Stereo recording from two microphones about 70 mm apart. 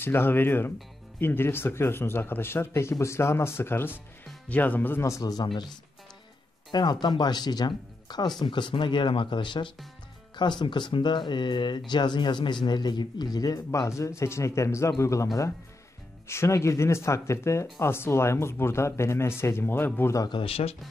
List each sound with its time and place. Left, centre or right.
0.0 s speech: left
5.2 s speech: left
10.6 s speech: left
13.7 s a man's voice: left
16.3 s speech: left